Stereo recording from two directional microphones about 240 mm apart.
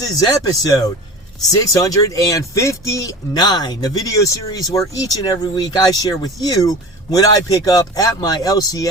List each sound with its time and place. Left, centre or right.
0.0 s speech: centre